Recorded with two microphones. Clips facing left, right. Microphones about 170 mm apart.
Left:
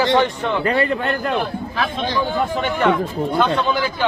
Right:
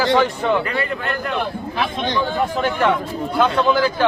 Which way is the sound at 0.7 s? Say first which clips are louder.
Left 5 dB; 35° left (ahead or behind).